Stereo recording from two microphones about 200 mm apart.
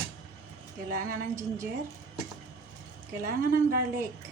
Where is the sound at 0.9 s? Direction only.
45° right (ahead or behind).